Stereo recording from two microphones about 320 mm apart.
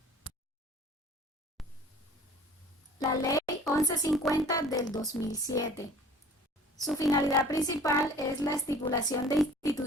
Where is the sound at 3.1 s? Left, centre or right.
Centre.